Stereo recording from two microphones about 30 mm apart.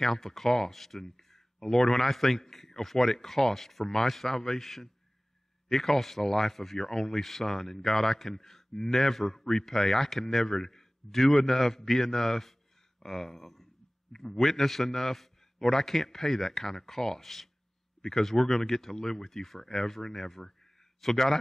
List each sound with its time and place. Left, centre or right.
0.0 s a man's voice: centre
3.8 s a man's voice: centre
7.5 s a man's voice: centre